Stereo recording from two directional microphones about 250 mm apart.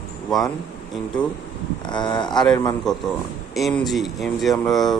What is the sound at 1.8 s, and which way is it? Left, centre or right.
Speech, centre.